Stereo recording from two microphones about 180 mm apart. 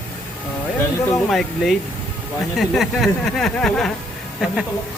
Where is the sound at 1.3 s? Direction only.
Centre (ahead or behind).